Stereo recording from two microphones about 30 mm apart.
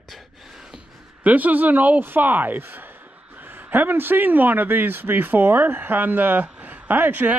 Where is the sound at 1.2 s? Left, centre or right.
Right.